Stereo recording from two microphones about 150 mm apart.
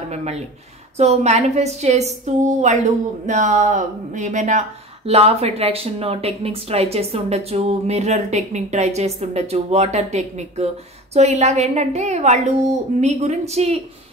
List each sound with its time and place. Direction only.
0.1 s a woman's voice: 45° right (ahead or behind)